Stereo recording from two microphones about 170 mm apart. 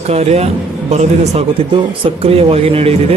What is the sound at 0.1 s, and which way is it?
Speech, 40° right (ahead or behind).